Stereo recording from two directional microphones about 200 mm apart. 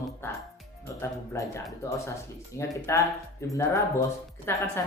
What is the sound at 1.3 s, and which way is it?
A woman's voice, 15° left (ahead or behind).